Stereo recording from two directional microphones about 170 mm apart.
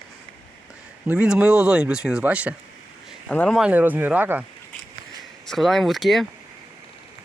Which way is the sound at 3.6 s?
10° right (ahead or behind).